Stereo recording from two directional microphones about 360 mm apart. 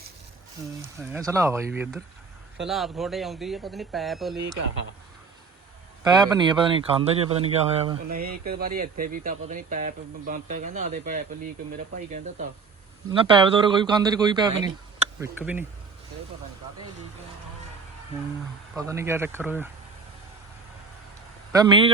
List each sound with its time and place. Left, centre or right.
0.9 s a man's voice: centre
6.0 s a man's voice: centre
18.7 s a man's voice: centre
21.5 s a man's voice: centre